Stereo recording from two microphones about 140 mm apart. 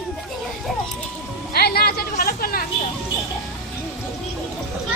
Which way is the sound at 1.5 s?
90° left.